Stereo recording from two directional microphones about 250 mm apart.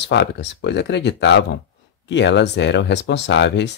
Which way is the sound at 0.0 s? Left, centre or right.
Left.